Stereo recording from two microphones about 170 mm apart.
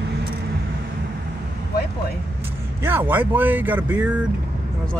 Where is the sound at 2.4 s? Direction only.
10° right (ahead or behind).